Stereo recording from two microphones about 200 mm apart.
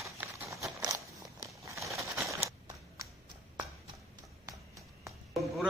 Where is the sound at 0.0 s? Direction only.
15° right (ahead or behind).